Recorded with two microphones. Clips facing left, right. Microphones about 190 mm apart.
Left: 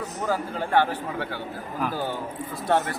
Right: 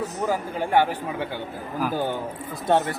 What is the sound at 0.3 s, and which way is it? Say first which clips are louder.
A man's voice: even; 15° right (ahead or behind).